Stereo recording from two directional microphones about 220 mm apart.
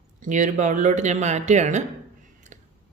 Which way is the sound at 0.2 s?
35° right (ahead or behind).